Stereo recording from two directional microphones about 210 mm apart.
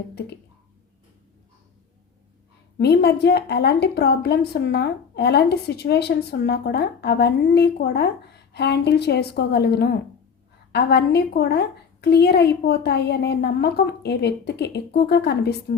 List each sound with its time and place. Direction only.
2.7 s a woman's voice: 50° left (ahead or behind)